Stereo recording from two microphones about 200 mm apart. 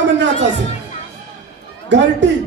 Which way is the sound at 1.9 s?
60° right (ahead or behind).